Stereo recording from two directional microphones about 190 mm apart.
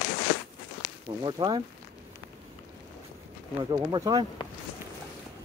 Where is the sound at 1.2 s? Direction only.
20° right (ahead or behind).